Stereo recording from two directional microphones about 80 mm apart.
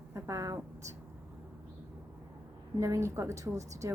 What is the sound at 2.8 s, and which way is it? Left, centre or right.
A woman's voice, right.